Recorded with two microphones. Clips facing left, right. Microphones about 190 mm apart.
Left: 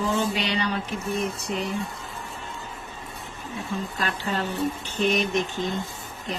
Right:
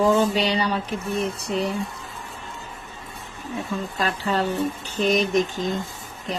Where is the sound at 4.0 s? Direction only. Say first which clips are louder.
Right 6 dB; 35° right (ahead or behind).